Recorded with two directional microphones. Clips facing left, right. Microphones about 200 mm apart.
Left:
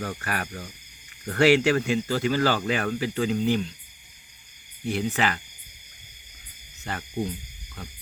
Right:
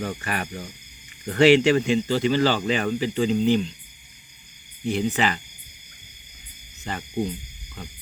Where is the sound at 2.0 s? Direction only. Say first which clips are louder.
Right 3 dB; 20° right (ahead or behind).